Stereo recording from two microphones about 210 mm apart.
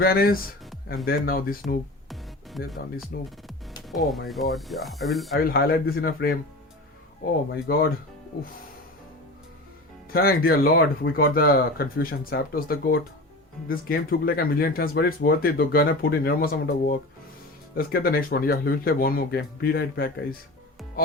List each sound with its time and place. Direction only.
0.0 s speech: 45° left (ahead or behind)
1.6 s music: centre (ahead or behind)
3.1 s speech: 45° left (ahead or behind)
3.8 s speech: centre (ahead or behind)
5.4 s speech: 45° left (ahead or behind)
7.7 s speech: 45° left (ahead or behind)
10.1 s speech: 45° left (ahead or behind)